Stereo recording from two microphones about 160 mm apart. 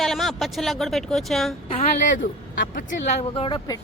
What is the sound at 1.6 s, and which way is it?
Speech, 40° left (ahead or behind).